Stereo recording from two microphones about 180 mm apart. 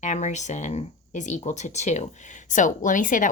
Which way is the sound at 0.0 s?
40° left (ahead or behind).